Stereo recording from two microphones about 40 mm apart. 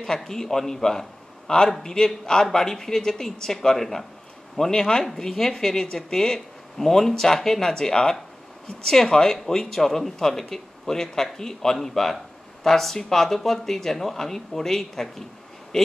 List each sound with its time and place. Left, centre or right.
0.0 s speech: centre